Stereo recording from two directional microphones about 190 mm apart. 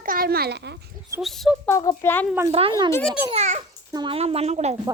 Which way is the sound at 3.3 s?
35° right (ahead or behind).